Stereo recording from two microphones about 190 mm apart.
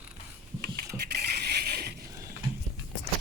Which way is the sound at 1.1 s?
60° right (ahead or behind).